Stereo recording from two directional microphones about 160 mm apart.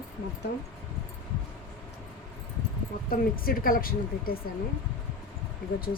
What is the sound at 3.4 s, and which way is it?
Speech, 65° left (ahead or behind).